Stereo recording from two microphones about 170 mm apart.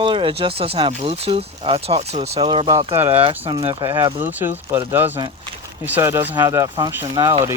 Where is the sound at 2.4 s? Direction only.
30° right (ahead or behind).